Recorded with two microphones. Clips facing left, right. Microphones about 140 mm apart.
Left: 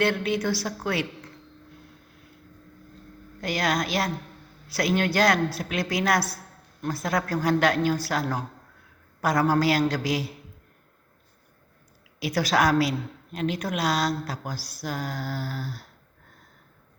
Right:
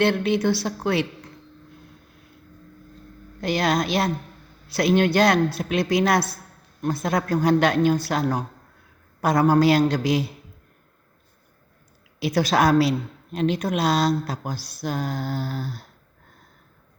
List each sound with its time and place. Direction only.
0.0 s speech: 25° right (ahead or behind)
3.4 s speech: 25° right (ahead or behind)
12.2 s speech: 25° right (ahead or behind)